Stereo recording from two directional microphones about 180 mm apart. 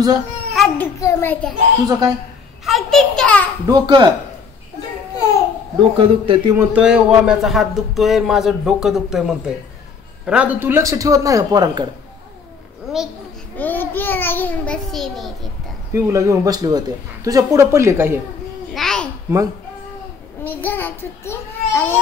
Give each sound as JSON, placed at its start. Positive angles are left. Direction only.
{"t": 0.5, "sound": "babbling", "side_deg": 0}
{"t": 0.9, "sound": "a child's voice", "side_deg": 20}
{"t": 1.9, "sound": "a man's voice", "side_deg": -20}
{"t": 2.6, "sound": "a sound", "side_deg": 0}
{"t": 3.6, "sound": "a man's voice", "side_deg": -20}
{"t": 5.8, "sound": "a man's voice", "side_deg": -30}
{"t": 6.5, "sound": "a man's voice", "side_deg": -5}
{"t": 13.6, "sound": "a child's voice", "side_deg": 10}
{"t": 15.9, "sound": "speech", "side_deg": -15}
{"t": 18.7, "sound": "babbling", "side_deg": 0}
{"t": 20.4, "sound": "a child's voice", "side_deg": 10}